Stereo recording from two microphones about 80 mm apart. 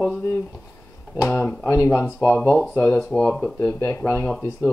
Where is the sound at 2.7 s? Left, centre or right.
Left.